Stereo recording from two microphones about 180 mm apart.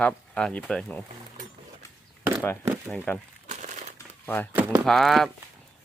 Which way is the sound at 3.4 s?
40° right (ahead or behind).